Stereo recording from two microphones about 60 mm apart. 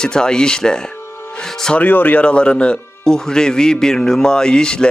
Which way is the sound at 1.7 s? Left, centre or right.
Left.